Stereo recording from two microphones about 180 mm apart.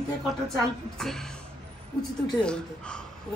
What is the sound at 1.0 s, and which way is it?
Speech, centre (ahead or behind).